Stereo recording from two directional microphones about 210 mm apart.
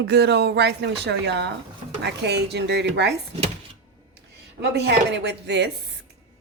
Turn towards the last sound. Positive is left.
turn(degrees=-55)  # may be behind; listen again after turning